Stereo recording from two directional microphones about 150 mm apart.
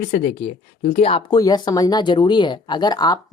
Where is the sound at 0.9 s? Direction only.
40° left (ahead or behind).